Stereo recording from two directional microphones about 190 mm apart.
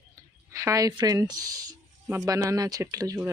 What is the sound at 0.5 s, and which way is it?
Speech, 15° right (ahead or behind).